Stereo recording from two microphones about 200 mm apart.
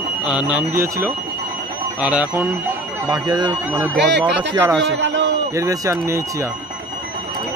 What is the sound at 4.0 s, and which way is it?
A man's voice, 60° right (ahead or behind).